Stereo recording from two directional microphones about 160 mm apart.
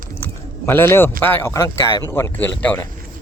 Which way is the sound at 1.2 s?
15° left (ahead or behind).